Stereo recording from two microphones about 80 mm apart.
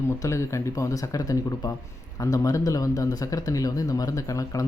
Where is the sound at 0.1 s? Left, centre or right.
Left.